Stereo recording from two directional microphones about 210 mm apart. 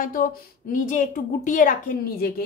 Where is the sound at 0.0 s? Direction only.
40° left (ahead or behind).